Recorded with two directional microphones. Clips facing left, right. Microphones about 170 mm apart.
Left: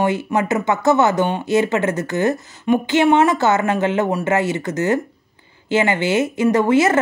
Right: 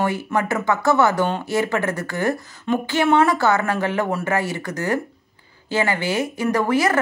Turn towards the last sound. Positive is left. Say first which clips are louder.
# left 4 dB
turn(degrees=20)  # may be behind; listen again after turning